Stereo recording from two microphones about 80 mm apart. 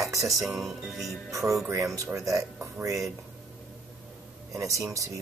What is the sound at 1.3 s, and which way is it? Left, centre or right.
Speech, right.